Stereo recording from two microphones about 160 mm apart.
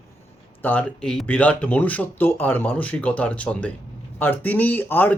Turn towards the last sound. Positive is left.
turn(degrees=10)  # may be behind; listen again after turning